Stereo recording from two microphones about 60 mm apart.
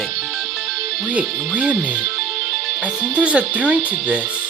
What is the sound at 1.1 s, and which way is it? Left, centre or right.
Speech, right.